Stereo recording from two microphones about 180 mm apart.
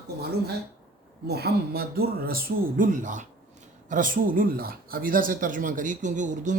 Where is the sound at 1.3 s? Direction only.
65° right (ahead or behind).